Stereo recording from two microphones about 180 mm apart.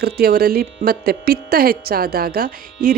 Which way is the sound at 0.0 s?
60° right (ahead or behind).